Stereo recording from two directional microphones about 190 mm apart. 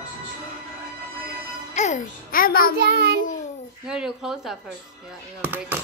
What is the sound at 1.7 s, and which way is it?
A child's voice, 40° left (ahead or behind).